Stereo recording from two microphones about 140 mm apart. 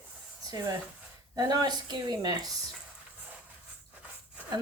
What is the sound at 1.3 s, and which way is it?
Speech, 25° right (ahead or behind).